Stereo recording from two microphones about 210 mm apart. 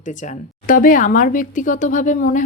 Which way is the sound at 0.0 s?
35° left (ahead or behind).